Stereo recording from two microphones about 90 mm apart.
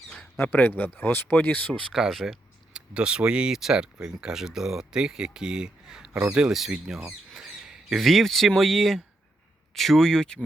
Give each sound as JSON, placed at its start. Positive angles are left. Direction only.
{"t": 0.3, "sound": "speech", "side_deg": 20}
{"t": 1.9, "sound": "speech", "side_deg": 0}